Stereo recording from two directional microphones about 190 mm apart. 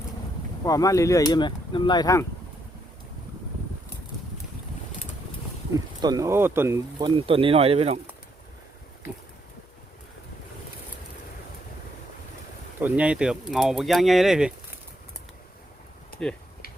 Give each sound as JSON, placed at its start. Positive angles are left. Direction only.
{"t": 0.6, "sound": "speech", "side_deg": 20}
{"t": 6.0, "sound": "speech", "side_deg": -20}
{"t": 7.0, "sound": "speech", "side_deg": -30}
{"t": 12.8, "sound": "speech", "side_deg": -5}